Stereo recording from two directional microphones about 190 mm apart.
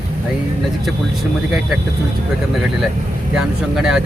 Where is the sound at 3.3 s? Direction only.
5° right (ahead or behind).